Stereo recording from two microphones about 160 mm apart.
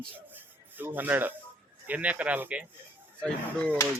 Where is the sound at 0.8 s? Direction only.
10° right (ahead or behind).